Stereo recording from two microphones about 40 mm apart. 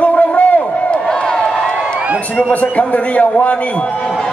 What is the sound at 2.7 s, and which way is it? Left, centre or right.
Speech, left.